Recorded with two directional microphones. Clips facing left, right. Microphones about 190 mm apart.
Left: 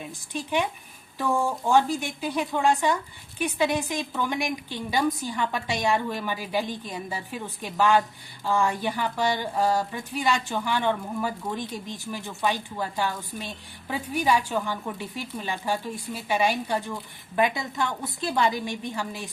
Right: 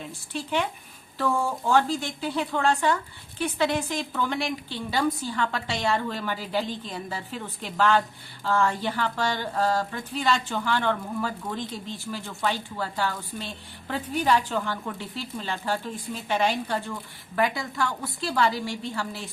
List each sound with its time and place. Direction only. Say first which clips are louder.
0.0 s speech: even; 15° left (ahead or behind)